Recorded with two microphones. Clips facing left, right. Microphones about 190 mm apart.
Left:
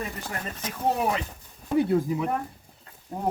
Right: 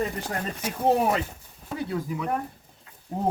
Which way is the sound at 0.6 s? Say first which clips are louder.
Right 4 dB; 10° right (ahead or behind).